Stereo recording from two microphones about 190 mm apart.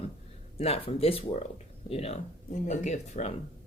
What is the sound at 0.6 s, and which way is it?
Speech, 30° left (ahead or behind).